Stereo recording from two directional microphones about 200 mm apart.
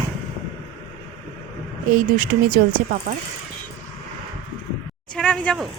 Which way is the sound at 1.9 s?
40° right (ahead or behind).